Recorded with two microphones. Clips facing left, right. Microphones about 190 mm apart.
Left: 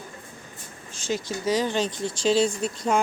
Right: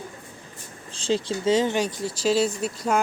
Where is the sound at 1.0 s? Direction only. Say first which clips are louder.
Right 4 dB; 30° right (ahead or behind).